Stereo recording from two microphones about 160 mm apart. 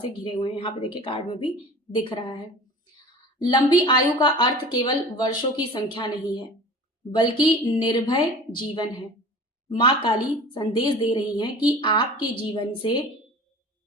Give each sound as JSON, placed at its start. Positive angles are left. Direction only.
{"t": 0.0, "sound": "a woman's voice", "side_deg": 35}